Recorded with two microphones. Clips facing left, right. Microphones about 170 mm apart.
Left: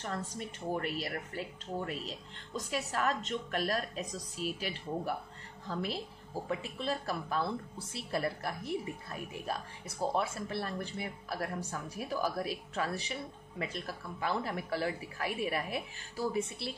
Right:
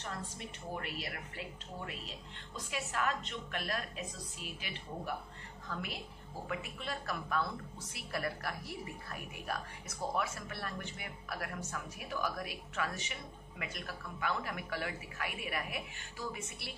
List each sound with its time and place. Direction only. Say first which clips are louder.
0.7 s a woman's voice: left 6 dB; 40° left (ahead or behind)